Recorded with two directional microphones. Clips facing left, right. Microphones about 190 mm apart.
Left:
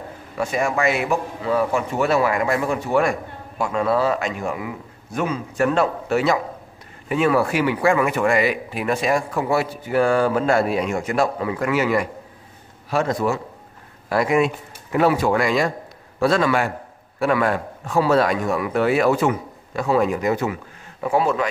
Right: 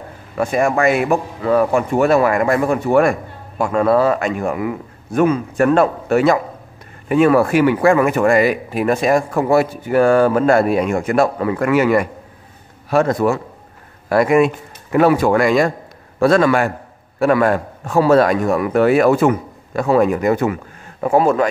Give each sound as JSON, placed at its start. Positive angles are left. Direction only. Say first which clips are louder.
{"t": 0.4, "sound": "a man's voice", "louder": "right 5 dB", "side_deg": -50}